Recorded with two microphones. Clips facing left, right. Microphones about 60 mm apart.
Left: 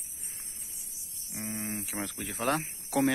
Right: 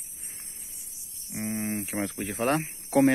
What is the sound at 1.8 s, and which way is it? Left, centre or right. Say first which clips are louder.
Speech: right 6 dB; right.